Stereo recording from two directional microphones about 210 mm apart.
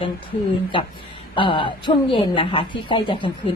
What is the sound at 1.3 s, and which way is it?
Speech, 25° left (ahead or behind).